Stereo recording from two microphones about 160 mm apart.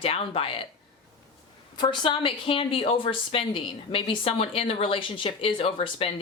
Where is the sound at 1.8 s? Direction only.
35° left (ahead or behind).